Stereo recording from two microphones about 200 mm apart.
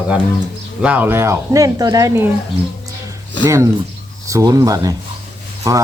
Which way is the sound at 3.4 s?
15° right (ahead or behind).